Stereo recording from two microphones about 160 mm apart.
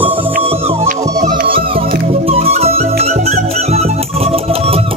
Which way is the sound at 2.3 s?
40° right (ahead or behind).